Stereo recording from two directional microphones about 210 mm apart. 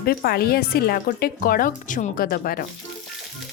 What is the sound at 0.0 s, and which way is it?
Speech, 45° left (ahead or behind).